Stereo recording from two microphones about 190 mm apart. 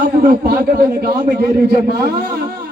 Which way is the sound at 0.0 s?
60° right (ahead or behind).